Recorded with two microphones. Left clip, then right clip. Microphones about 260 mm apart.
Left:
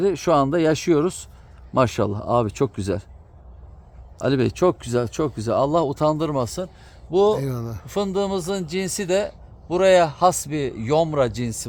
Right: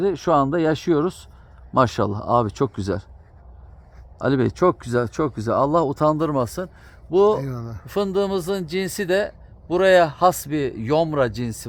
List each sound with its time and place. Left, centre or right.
0.0 s speech: centre
4.2 s a man's voice: centre
7.3 s speech: left
7.9 s a man's voice: right